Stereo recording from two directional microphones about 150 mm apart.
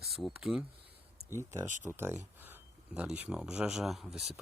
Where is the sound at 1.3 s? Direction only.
15° right (ahead or behind).